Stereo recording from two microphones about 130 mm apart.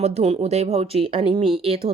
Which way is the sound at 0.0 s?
55° right (ahead or behind).